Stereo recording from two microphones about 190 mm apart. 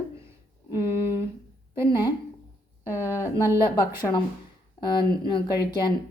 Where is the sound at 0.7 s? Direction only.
15° right (ahead or behind).